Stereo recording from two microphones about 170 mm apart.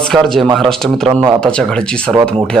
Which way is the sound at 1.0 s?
20° right (ahead or behind).